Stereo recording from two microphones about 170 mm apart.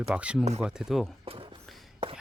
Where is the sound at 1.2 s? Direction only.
30° right (ahead or behind).